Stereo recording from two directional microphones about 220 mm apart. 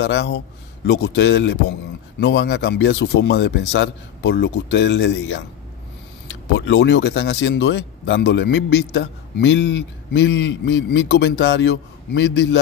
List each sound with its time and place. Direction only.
0.0 s a man's voice: 50° left (ahead or behind)